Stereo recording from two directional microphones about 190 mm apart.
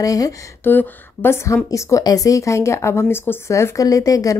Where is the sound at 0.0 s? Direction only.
20° left (ahead or behind).